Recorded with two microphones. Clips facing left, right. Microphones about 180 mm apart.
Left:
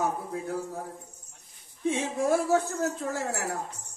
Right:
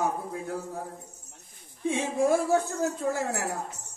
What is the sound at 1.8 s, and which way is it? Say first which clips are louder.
Speech: right 1 dB; 15° right (ahead or behind).